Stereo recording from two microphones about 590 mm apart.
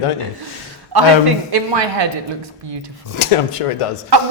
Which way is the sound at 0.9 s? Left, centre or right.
Right.